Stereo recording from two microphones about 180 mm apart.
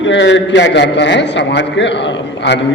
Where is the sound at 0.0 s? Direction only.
85° left.